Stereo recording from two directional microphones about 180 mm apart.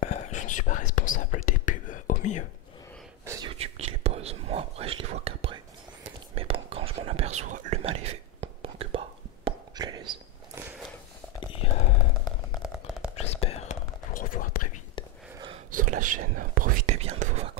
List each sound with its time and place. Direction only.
0.0 s whispering: 45° left (ahead or behind)
3.3 s whispering: 20° right (ahead or behind)
3.5 s whispering: 35° right (ahead or behind)
11.6 s a sound: 35° left (ahead or behind)
12.6 s a sound: 5° right (ahead or behind)
13.1 s whispering: 35° left (ahead or behind)
14.1 s whispering: 50° left (ahead or behind)
15.7 s whispering: 45° right (ahead or behind)
17.0 s whispering: 40° right (ahead or behind)